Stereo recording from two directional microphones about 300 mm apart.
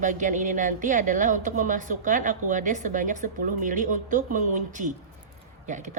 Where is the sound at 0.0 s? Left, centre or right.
Right.